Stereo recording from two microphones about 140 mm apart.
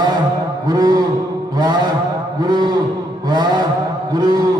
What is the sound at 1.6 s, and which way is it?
Cattle, 30° right (ahead or behind).